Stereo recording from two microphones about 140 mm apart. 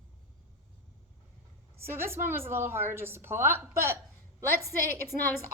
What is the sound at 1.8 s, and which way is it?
A woman's voice, 15° right (ahead or behind).